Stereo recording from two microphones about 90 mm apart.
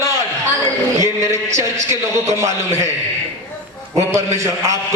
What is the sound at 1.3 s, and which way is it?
A man's voice, 35° right (ahead or behind).